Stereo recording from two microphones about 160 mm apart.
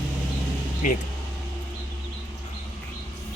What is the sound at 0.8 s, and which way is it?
Speech, 55° left (ahead or behind).